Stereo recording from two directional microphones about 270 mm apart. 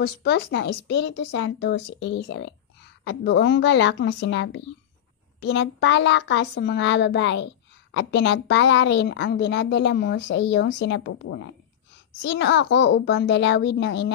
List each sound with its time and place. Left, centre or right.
0.0 s speech: left